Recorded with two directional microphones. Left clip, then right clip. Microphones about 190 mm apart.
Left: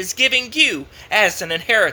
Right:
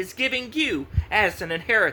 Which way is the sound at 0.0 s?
15° right (ahead or behind).